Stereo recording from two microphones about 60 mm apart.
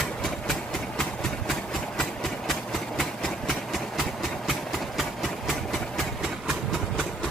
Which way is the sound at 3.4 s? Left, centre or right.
Centre.